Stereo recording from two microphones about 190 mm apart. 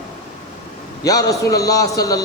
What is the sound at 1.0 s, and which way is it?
A man's voice, 20° left (ahead or behind).